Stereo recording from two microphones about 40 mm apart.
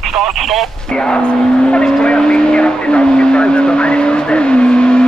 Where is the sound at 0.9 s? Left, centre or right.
Left.